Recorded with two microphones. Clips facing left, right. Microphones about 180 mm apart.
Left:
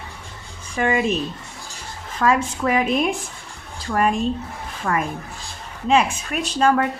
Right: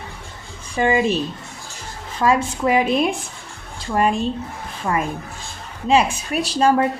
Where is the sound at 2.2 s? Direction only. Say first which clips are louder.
Right 1 dB; 30° right (ahead or behind).